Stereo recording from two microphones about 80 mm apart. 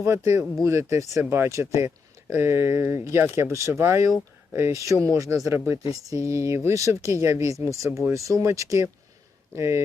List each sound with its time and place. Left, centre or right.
0.0 s speech: right